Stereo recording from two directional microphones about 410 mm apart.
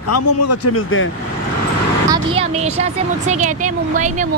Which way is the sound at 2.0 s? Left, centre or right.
Centre.